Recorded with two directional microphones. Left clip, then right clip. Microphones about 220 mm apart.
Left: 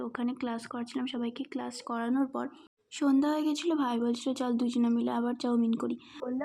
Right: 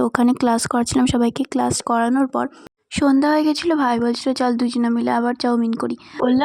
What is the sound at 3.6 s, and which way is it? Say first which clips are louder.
Speech: right 12 dB; 25° right (ahead or behind).